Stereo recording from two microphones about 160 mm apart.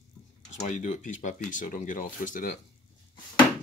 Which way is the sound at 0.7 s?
50° left (ahead or behind).